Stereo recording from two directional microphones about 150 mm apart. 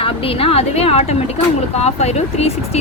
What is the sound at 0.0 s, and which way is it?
A woman's voice, 40° left (ahead or behind).